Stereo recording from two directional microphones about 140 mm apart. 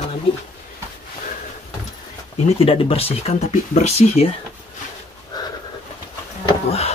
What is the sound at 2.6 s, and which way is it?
Speech, 45° left (ahead or behind).